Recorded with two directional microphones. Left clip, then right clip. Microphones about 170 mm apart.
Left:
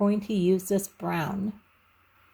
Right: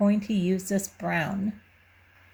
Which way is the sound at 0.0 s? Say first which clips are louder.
Left 1 dB; 30° left (ahead or behind).